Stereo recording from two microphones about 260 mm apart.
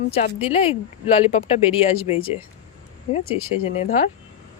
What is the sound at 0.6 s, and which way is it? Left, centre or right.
Speech, left.